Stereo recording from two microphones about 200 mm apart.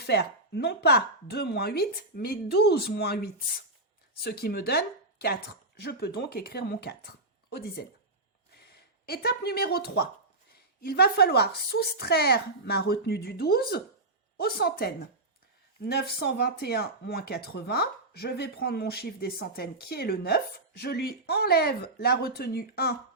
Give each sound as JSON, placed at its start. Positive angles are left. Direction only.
{"t": 0.0, "sound": "speech", "side_deg": 55}
{"t": 9.0, "sound": "speech", "side_deg": 50}